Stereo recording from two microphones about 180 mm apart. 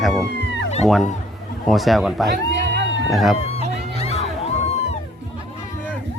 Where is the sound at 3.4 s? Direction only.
35° left (ahead or behind).